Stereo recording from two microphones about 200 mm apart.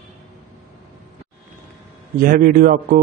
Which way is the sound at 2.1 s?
45° right (ahead or behind).